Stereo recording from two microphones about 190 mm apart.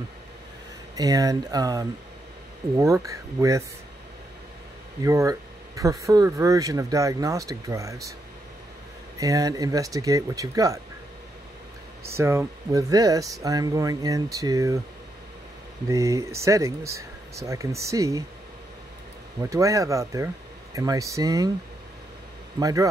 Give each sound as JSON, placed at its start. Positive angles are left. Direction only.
{"t": 0.9, "sound": "speech", "side_deg": -20}
{"t": 5.0, "sound": "speech", "side_deg": -15}
{"t": 9.2, "sound": "speech", "side_deg": -20}
{"t": 12.0, "sound": "speech", "side_deg": -15}
{"t": 15.9, "sound": "speech", "side_deg": -15}
{"t": 19.5, "sound": "speech", "side_deg": -15}
{"t": 22.6, "sound": "speech", "side_deg": -20}